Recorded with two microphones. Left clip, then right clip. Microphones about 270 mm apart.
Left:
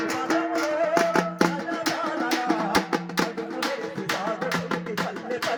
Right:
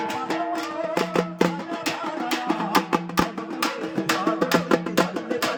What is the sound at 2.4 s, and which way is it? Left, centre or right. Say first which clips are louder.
Music: right 1 dB; centre.